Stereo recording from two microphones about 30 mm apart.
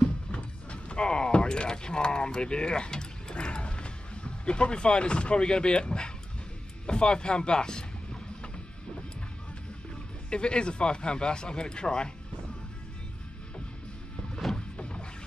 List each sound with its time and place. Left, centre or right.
0.3 s speech: left
10.3 s speech: left
14.4 s a sound: centre
14.8 s music: left